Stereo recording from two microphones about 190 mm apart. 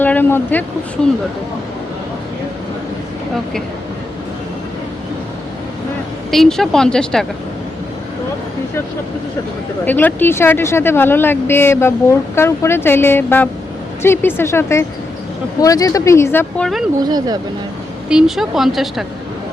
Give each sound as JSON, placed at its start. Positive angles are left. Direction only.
{"t": 0.0, "sound": "a sound", "side_deg": 10}
{"t": 6.3, "sound": "a woman's voice", "side_deg": 0}
{"t": 9.8, "sound": "speech", "side_deg": 10}
{"t": 17.0, "sound": "speech", "side_deg": -20}
{"t": 18.1, "sound": "a woman's voice", "side_deg": -5}